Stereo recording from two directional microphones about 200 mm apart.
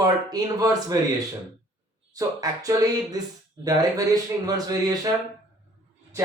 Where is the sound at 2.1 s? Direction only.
15° right (ahead or behind).